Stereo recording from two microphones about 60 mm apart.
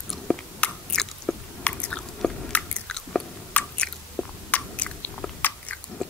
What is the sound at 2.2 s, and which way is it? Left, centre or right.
Chewing, centre.